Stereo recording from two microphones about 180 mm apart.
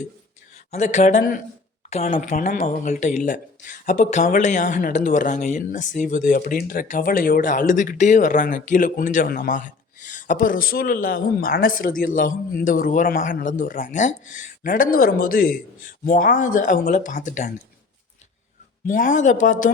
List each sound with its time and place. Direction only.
0.7 s speech: 40° left (ahead or behind)
18.9 s speech: 45° left (ahead or behind)